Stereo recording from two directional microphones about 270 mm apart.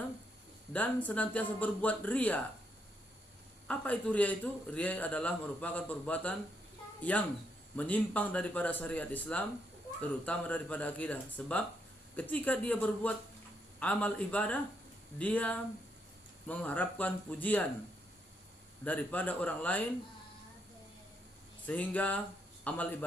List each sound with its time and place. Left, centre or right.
0.7 s a man's voice: centre
3.7 s a man's voice: centre
18.9 s a man's voice: centre
21.7 s a man's voice: centre